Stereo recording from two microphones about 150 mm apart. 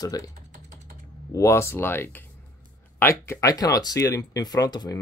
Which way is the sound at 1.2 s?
20° left (ahead or behind).